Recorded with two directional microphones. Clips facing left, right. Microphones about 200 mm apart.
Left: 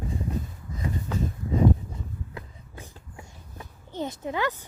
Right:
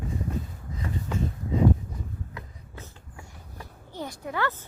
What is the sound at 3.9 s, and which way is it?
Speech, 20° left (ahead or behind).